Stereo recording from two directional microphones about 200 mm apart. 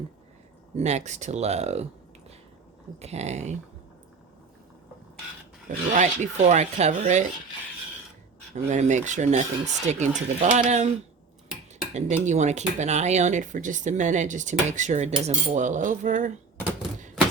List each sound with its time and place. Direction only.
0.8 s speech: 35° right (ahead or behind)
3.0 s speech: 35° right (ahead or behind)
5.6 s speech: 40° right (ahead or behind)
8.7 s speech: 35° right (ahead or behind)